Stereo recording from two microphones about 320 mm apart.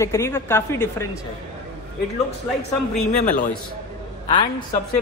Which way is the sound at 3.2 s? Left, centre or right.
Left.